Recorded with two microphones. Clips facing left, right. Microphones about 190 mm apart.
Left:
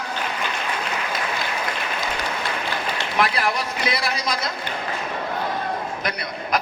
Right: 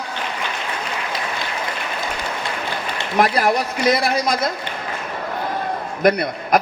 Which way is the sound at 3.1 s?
45° right (ahead or behind).